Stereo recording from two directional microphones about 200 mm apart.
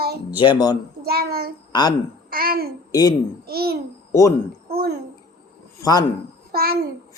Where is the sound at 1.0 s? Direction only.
50° right (ahead or behind).